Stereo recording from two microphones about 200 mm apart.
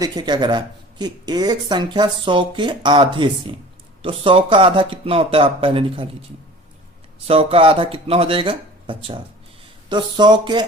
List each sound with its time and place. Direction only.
0.0 s speech: 20° right (ahead or behind)
7.3 s speech: 30° right (ahead or behind)